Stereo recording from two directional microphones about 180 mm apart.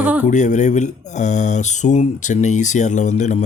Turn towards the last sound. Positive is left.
turn(degrees=40)  # may be behind; listen again after turning